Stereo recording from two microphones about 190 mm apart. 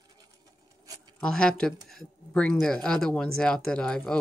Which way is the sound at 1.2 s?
5° left (ahead or behind).